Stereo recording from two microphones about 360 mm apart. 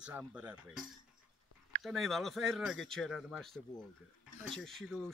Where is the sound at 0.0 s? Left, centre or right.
Centre.